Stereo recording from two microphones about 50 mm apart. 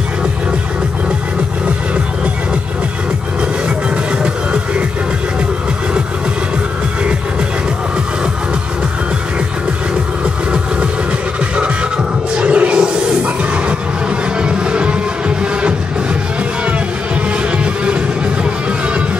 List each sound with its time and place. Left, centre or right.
12.4 s music: right